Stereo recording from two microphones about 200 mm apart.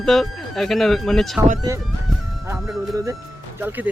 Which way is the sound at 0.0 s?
Centre (ahead or behind).